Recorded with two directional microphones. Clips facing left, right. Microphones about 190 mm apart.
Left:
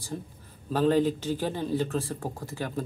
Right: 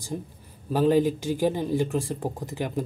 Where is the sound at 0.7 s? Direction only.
10° right (ahead or behind).